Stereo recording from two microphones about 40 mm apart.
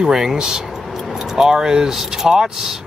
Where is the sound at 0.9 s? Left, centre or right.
Centre.